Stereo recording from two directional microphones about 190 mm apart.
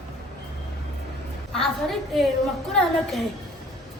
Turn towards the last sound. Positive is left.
turn(degrees=0)  # may be behind; listen again after turning